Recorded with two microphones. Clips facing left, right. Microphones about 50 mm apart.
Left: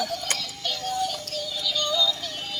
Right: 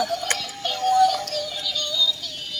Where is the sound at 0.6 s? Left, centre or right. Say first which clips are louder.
Right 7 dB; right.